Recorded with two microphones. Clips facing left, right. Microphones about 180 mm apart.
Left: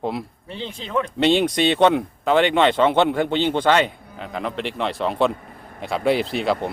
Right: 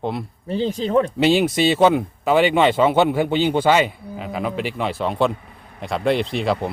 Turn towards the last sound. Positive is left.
turn(degrees=0)  # may be behind; listen again after turning